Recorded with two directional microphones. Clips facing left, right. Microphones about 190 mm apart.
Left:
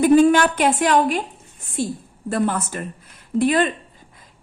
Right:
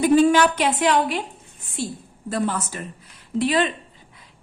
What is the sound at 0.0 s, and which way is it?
A woman's voice, 50° left (ahead or behind).